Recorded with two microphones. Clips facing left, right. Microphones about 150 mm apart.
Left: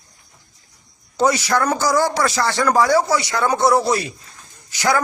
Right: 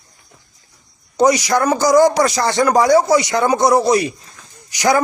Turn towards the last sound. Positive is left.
turn(degrees=-15)  # may be behind; listen again after turning